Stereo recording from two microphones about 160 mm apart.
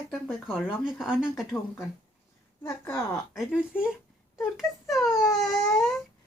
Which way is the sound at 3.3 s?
5° right (ahead or behind).